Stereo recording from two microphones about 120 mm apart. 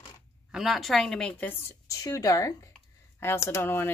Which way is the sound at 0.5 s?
Centre (ahead or behind).